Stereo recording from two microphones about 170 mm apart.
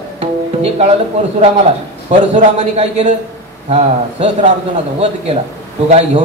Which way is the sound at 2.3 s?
40° right (ahead or behind).